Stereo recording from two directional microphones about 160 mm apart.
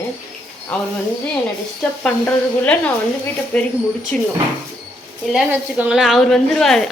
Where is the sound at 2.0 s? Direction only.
10° left (ahead or behind).